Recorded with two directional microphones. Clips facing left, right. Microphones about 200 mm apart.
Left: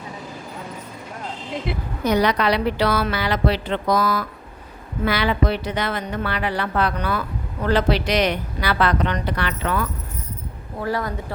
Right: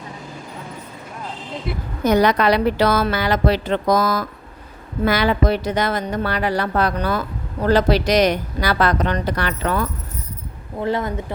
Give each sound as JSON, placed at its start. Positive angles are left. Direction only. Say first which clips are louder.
{"t": 2.0, "sound": "a woman's voice", "louder": "right 3 dB", "side_deg": -45}
{"t": 10.8, "sound": "speech", "louder": "right 3 dB", "side_deg": -20}